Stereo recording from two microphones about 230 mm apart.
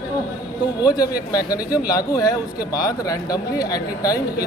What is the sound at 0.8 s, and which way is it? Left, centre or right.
A man's voice, centre.